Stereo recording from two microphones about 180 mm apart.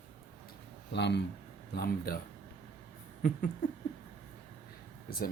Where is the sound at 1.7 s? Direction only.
60° left (ahead or behind).